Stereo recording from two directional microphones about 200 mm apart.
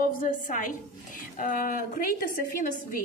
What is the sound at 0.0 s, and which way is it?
A woman's voice, 40° left (ahead or behind).